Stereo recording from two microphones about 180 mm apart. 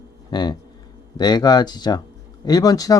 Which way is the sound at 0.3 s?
25° left (ahead or behind).